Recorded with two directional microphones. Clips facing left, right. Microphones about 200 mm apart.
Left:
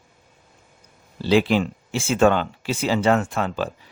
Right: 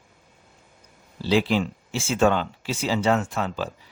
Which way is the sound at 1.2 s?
60° left (ahead or behind).